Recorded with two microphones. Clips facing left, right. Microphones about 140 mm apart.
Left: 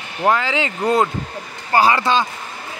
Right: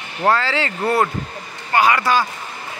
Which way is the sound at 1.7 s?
30° left (ahead or behind).